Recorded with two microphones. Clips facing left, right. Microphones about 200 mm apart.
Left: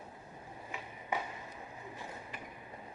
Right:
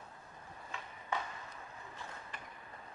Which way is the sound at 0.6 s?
15° left (ahead or behind).